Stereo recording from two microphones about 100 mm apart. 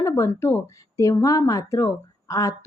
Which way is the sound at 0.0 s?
30° left (ahead or behind).